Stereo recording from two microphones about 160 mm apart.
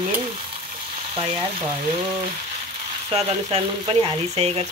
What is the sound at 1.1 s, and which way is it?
Speech, 35° right (ahead or behind).